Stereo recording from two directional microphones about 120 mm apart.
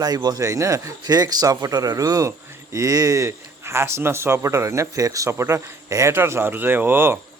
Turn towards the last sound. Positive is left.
turn(degrees=-20)  # may be behind; listen again after turning